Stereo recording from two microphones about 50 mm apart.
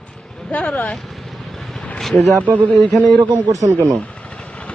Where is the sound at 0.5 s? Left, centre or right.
Left.